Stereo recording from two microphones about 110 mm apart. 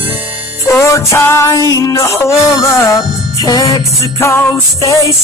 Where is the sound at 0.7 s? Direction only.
25° left (ahead or behind).